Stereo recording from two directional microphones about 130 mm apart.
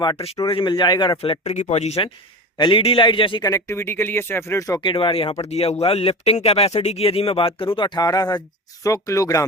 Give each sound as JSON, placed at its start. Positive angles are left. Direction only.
{"t": 0.4, "sound": "speech", "side_deg": 40}
{"t": 2.6, "sound": "a man's voice", "side_deg": 40}
{"t": 3.4, "sound": "speech", "side_deg": 25}
{"t": 4.8, "sound": "speech", "side_deg": 40}